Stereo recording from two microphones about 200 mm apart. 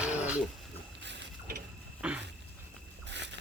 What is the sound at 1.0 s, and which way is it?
Boat, 60° right (ahead or behind).